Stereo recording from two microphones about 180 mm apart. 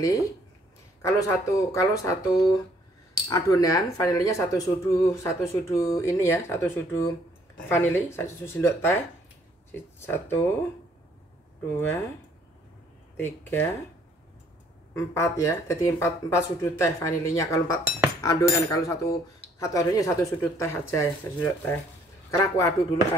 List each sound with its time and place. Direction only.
1.0 s speech: 15° left (ahead or behind)
11.7 s speech: 10° left (ahead or behind)
13.2 s speech: 10° left (ahead or behind)
15.0 s speech: 15° left (ahead or behind)